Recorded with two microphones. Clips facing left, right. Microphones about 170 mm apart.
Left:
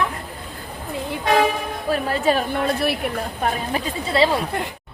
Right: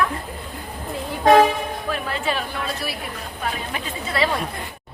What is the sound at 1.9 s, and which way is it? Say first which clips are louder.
A woman's voice: left 8 dB; 40° left (ahead or behind).